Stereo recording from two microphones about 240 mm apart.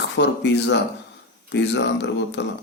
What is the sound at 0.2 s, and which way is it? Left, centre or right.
A man's voice, left.